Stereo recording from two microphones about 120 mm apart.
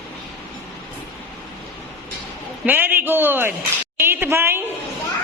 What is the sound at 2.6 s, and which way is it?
A man's voice, 15° right (ahead or behind).